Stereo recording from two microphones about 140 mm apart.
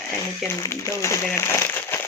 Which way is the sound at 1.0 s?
20° left (ahead or behind).